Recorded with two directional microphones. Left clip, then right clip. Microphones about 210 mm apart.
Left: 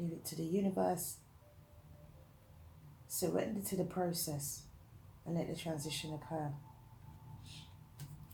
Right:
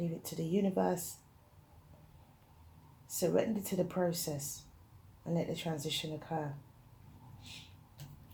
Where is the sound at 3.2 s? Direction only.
40° right (ahead or behind).